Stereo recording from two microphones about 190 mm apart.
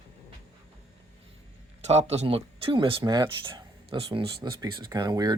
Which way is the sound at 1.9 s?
35° right (ahead or behind).